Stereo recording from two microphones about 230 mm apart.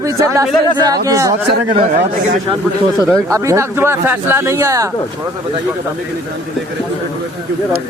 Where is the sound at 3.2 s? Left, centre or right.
Centre.